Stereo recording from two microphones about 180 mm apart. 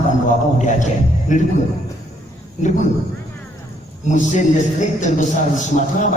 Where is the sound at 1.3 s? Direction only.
45° left (ahead or behind).